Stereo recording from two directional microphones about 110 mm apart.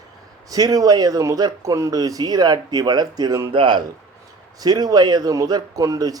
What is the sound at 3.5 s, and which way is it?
Speech, 50° right (ahead or behind).